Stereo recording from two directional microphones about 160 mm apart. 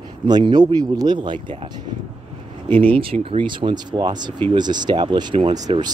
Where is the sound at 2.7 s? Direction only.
35° right (ahead or behind).